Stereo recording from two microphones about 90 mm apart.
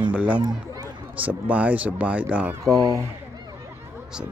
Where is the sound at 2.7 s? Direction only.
40° right (ahead or behind).